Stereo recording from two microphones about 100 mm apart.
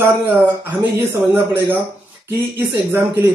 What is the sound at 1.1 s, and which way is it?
Speech, 25° right (ahead or behind).